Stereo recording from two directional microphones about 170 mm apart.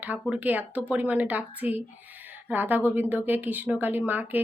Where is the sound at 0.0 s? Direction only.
10° right (ahead or behind).